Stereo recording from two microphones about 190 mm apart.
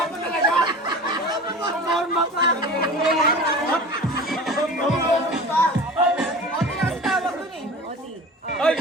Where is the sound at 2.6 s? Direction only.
50° left (ahead or behind).